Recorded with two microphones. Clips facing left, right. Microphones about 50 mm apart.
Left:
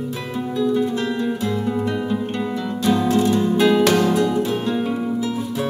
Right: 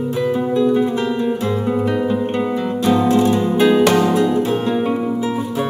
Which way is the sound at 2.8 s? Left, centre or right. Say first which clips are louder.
Right 3 dB; centre.